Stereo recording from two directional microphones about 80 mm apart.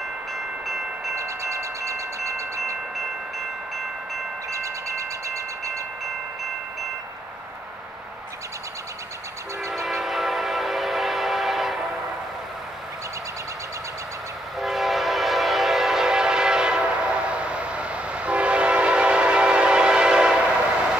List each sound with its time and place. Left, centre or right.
0.7 s wind chime: centre
1.1 s train: right
4.5 s a sound: right
9.8 s train: centre
14.6 s train: centre